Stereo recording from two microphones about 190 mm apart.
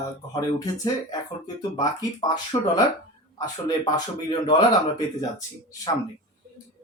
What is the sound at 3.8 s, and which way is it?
Speech, 20° left (ahead or behind).